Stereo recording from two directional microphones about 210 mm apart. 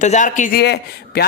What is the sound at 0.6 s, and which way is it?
Speech, 50° left (ahead or behind).